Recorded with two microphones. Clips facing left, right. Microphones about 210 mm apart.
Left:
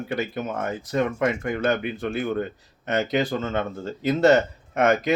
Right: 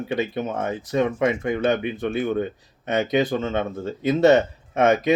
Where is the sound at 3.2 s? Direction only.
20° right (ahead or behind).